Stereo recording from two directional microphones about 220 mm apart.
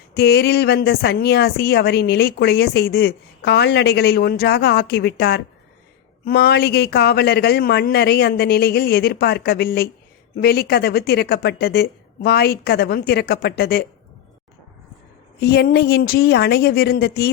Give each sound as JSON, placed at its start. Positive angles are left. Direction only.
{"t": 0.1, "sound": "speech", "side_deg": 50}
{"t": 15.4, "sound": "speech", "side_deg": 45}